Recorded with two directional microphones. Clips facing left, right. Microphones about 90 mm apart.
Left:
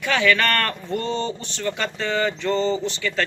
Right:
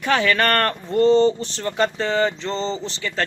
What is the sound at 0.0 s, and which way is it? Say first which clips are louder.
Speech: right 1 dB; 35° right (ahead or behind).